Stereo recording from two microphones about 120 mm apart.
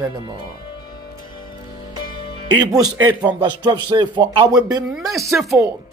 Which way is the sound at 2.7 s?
30° right (ahead or behind).